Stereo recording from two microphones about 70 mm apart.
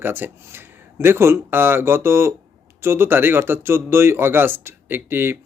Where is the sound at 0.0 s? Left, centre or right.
Right.